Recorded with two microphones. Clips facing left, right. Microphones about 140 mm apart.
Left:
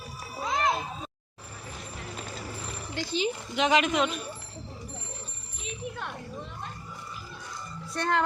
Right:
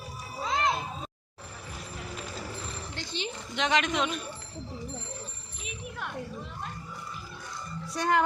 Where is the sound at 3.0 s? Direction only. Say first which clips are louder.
Left 9 dB; 10° left (ahead or behind).